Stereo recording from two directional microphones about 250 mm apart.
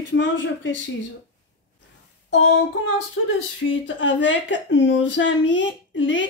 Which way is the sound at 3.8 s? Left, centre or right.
Left.